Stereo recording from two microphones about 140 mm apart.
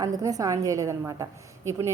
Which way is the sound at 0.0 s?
25° right (ahead or behind).